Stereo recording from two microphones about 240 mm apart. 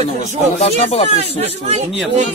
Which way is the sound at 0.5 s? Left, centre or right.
Left.